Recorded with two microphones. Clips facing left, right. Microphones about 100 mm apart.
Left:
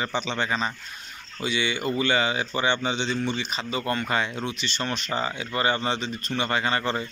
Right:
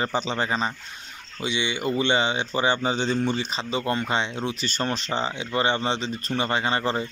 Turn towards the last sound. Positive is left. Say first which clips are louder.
# right 1 dB
turn(degrees=-25)  # may be behind; listen again after turning